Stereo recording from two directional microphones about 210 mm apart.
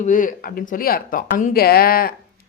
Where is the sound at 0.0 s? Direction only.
40° left (ahead or behind).